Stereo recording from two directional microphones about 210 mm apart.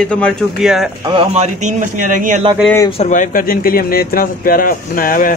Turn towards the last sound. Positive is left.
turn(degrees=45)  # may be behind; listen again after turning